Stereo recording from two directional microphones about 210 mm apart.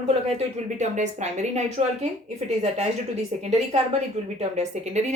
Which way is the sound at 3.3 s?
30° right (ahead or behind).